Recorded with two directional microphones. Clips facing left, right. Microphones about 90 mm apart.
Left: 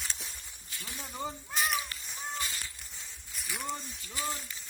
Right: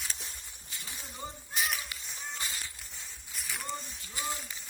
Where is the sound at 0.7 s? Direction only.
20° right (ahead or behind).